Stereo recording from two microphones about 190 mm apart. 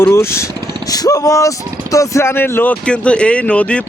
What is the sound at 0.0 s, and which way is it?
Speech, 15° left (ahead or behind).